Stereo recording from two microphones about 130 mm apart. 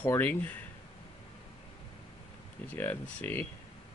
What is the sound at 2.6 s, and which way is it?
Speech, 15° left (ahead or behind).